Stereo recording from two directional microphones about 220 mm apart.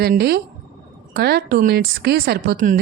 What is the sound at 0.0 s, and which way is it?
Speech, 45° right (ahead or behind).